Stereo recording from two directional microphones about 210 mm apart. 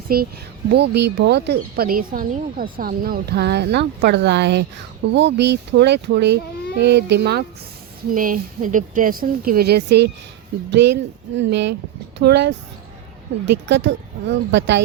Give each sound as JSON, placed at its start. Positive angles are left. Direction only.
{"t": 0.1, "sound": "speech", "side_deg": -45}
{"t": 8.1, "sound": "speech", "side_deg": -40}